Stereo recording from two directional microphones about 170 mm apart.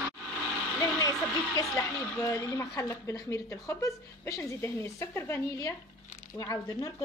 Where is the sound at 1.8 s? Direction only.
15° left (ahead or behind).